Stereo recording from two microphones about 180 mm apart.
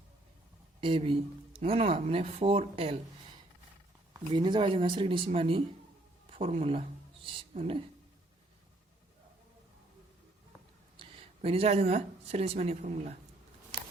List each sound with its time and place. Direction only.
0.8 s speech: 30° right (ahead or behind)
4.3 s speech: 25° right (ahead or behind)
10.9 s speech: 30° right (ahead or behind)